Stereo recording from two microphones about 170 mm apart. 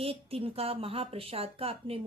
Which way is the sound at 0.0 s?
35° right (ahead or behind).